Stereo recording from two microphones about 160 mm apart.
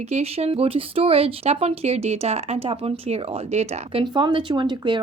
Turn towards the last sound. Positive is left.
turn(degrees=-30)  # may be behind; listen again after turning